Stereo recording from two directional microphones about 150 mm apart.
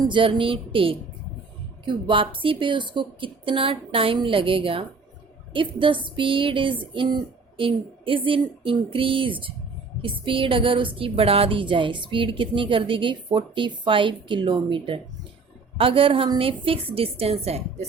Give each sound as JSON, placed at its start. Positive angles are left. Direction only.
{"t": 0.0, "sound": "a woman's voice", "side_deg": -35}